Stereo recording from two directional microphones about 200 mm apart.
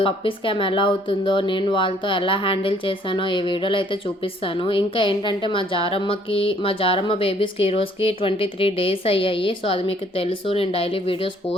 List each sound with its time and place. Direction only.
0.0 s a woman's voice: 25° left (ahead or behind)